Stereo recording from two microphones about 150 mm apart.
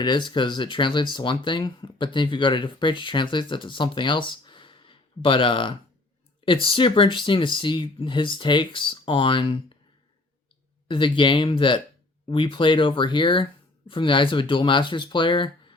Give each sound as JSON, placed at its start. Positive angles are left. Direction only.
{"t": 0.0, "sound": "speech", "side_deg": 30}
{"t": 10.8, "sound": "speech", "side_deg": 35}